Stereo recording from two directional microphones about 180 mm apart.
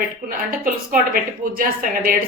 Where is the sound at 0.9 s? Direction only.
55° right (ahead or behind).